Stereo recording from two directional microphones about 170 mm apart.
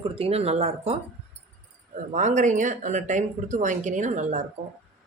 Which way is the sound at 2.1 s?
45° right (ahead or behind).